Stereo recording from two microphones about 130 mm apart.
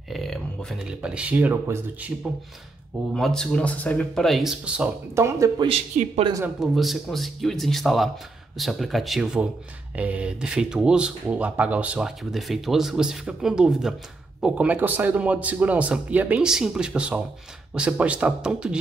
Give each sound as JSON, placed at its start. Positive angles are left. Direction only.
{"t": 0.1, "sound": "speech", "side_deg": 0}
{"t": 3.2, "sound": "speech", "side_deg": 5}
{"t": 5.1, "sound": "speech", "side_deg": -20}
{"t": 6.6, "sound": "a man's voice", "side_deg": 0}